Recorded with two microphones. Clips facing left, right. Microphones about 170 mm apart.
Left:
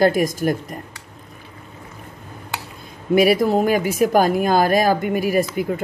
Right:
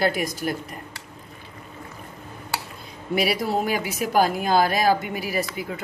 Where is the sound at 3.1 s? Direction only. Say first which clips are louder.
Left 8 dB; 50° left (ahead or behind).